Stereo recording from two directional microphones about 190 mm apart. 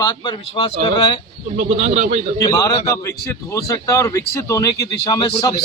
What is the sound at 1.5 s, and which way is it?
Speech, 40° right (ahead or behind).